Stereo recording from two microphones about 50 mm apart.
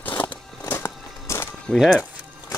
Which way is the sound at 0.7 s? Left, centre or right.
Left.